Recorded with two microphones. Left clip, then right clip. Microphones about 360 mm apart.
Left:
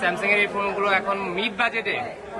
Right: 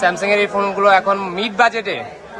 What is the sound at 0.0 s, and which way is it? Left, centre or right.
Speech, centre.